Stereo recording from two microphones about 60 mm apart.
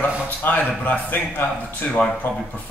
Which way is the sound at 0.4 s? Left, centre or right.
Left.